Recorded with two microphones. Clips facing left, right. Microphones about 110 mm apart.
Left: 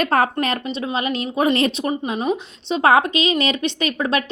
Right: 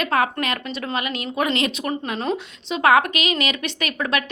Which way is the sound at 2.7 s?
30° left (ahead or behind).